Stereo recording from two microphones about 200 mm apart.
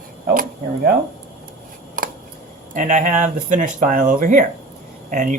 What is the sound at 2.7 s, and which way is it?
Speech, 40° right (ahead or behind).